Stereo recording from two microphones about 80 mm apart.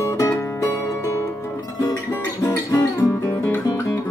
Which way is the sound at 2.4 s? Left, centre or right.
Left.